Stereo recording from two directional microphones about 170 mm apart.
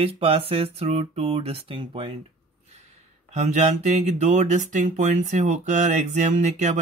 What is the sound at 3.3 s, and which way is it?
Speech, 40° right (ahead or behind).